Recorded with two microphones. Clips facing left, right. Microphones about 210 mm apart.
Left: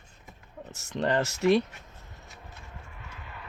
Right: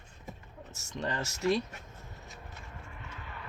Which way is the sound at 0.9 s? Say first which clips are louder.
Left 8 dB; 70° left (ahead or behind).